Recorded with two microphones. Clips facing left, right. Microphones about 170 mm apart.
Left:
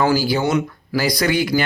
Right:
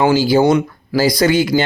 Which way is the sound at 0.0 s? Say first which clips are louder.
Right 5 dB; 25° right (ahead or behind).